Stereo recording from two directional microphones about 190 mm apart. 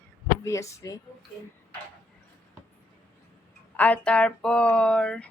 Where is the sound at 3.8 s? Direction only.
5° left (ahead or behind).